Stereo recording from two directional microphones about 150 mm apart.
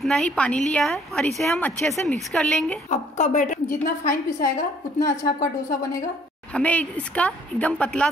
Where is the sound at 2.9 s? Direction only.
55° left (ahead or behind).